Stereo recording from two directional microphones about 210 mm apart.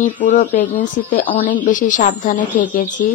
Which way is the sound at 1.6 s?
40° left (ahead or behind).